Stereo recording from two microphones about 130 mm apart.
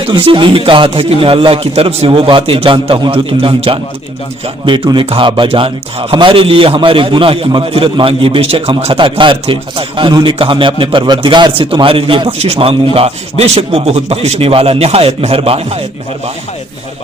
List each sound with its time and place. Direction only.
0.1 s a man's voice: 40° right (ahead or behind)